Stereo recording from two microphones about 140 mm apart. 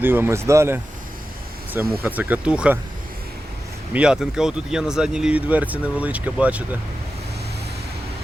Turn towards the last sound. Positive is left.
turn(degrees=-10)  # may be behind; listen again after turning